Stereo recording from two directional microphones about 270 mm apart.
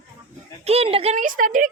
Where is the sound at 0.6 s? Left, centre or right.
Right.